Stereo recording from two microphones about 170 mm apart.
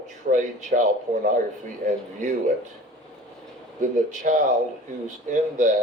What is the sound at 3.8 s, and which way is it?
Speech, 45° right (ahead or behind).